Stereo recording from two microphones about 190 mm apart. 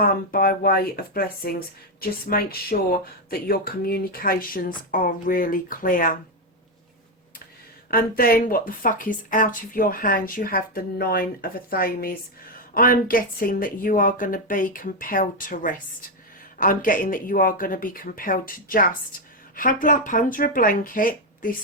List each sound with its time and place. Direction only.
0.0 s speech: 50° left (ahead or behind)
7.9 s speech: 50° left (ahead or behind)